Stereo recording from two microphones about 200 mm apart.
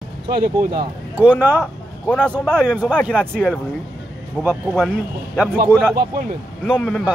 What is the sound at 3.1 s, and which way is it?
Speech, 5° left (ahead or behind).